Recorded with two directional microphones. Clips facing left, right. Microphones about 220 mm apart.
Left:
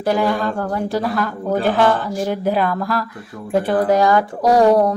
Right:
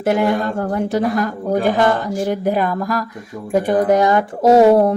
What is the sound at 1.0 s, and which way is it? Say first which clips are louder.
Speech: right 3 dB; 45° right (ahead or behind).